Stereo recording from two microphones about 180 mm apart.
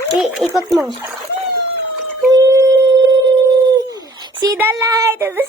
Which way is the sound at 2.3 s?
20° right (ahead or behind).